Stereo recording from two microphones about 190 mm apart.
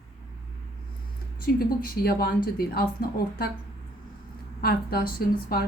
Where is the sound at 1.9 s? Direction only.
55° left (ahead or behind).